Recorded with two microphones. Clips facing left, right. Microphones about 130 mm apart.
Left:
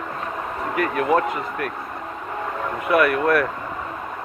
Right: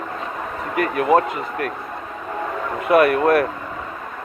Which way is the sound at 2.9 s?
25° right (ahead or behind).